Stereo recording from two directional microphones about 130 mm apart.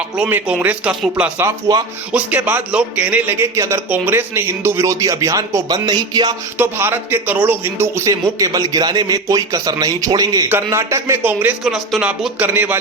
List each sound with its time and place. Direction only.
0.2 s a man's voice: 15° right (ahead or behind); by 6.3 s 30° right (ahead or behind)
6.6 s a man's voice: 15° right (ahead or behind)
11.6 s speech: centre (ahead or behind)